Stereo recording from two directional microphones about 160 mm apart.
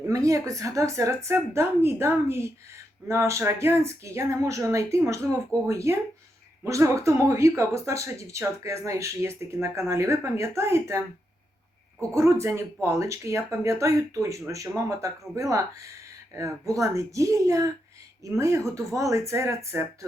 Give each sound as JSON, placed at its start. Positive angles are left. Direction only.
{"t": 0.1, "sound": "a woman's voice", "side_deg": -20}
{"t": 12.1, "sound": "speech", "side_deg": -20}